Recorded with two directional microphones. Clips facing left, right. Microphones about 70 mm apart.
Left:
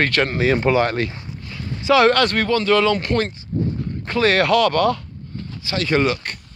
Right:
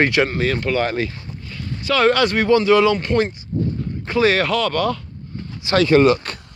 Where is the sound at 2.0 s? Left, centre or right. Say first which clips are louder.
Even; centre.